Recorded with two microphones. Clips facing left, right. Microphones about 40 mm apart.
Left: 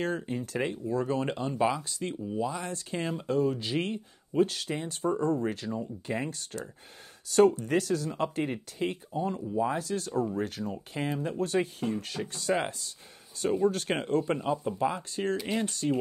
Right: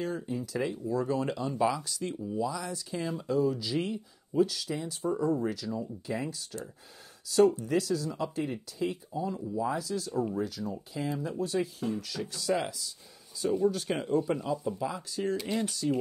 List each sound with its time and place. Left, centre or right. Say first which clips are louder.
0.0 s speech: left 2 dB; left
1.5 s speech: left 1 dB; left
15.8 s speech: left 1 dB; left